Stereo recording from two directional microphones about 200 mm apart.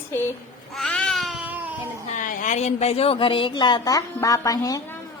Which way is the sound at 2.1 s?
40° left (ahead or behind).